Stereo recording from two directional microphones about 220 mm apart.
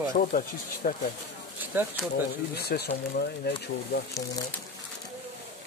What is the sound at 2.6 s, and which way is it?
Speech, 45° left (ahead or behind).